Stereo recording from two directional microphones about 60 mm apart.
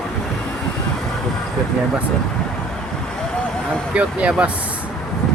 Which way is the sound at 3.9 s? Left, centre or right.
Centre.